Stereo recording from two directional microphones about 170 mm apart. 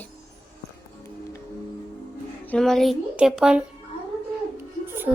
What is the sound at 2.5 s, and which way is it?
Speech, 5° left (ahead or behind).